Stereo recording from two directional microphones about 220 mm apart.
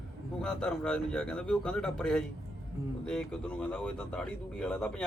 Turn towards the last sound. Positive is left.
turn(degrees=5)  # may be behind; listen again after turning